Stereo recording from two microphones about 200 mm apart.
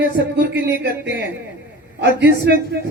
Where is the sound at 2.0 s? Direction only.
55° right (ahead or behind).